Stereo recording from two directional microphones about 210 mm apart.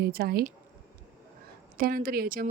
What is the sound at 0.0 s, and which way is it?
Speech, 45° right (ahead or behind).